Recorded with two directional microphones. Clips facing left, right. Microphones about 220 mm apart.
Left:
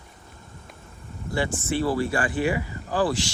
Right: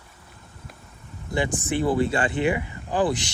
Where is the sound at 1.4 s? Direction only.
15° right (ahead or behind).